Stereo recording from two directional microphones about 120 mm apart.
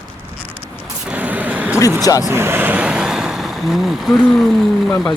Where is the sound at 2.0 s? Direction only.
30° left (ahead or behind).